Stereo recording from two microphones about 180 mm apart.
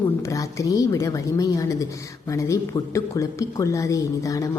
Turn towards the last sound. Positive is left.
turn(degrees=20)  # may be behind; listen again after turning